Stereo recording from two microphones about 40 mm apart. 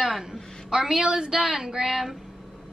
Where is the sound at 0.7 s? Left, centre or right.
Centre.